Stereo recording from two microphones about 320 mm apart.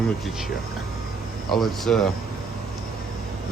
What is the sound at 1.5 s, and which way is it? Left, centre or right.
Speech, centre.